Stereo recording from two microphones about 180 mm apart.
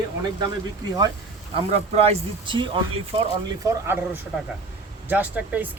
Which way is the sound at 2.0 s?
30° right (ahead or behind).